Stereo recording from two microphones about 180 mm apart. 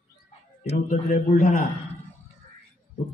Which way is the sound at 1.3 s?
55° left (ahead or behind).